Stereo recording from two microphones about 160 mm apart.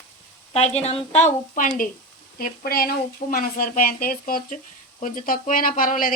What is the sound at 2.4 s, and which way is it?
A woman's voice, 65° left (ahead or behind).